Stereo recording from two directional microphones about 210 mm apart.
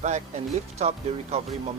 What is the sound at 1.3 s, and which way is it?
Speech, 30° right (ahead or behind).